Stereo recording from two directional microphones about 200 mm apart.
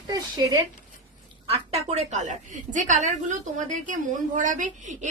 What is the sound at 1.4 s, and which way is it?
A woman's voice, 30° right (ahead or behind).